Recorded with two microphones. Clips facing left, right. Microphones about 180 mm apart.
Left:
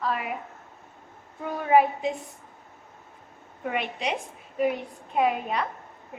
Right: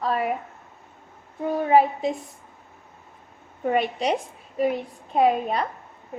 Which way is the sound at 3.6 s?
40° right (ahead or behind).